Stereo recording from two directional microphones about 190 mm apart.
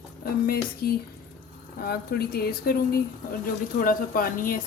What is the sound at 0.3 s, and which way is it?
A woman's voice, 50° left (ahead or behind).